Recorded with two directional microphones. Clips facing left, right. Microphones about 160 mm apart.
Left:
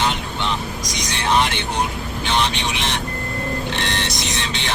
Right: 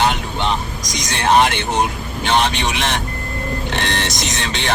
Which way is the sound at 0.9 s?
50° right (ahead or behind).